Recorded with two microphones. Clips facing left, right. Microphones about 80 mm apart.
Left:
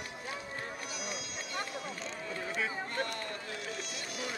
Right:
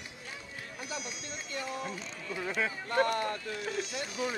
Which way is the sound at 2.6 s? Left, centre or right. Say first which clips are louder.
Right 7 dB; right.